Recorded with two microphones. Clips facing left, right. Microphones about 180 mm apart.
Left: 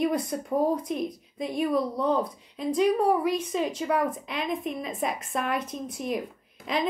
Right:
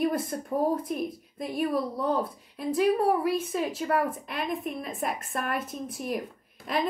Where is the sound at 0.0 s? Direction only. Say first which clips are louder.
Left 1 dB; 5° right (ahead or behind).